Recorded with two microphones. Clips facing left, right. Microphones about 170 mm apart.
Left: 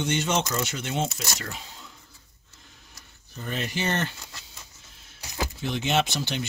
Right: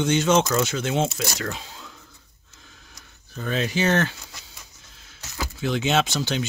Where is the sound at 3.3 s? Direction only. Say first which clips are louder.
Right 6 dB; 90° right.